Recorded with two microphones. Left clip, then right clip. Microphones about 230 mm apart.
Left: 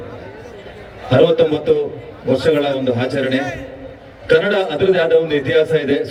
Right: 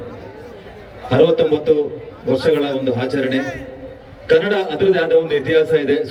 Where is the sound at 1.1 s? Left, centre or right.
Right.